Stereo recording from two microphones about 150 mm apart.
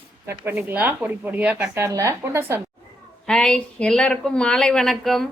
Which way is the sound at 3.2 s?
5° left (ahead or behind).